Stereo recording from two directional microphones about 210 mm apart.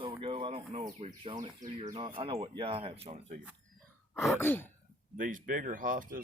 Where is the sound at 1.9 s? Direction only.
25° right (ahead or behind).